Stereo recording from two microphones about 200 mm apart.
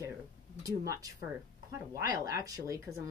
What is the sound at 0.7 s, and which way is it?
Speech, 15° right (ahead or behind).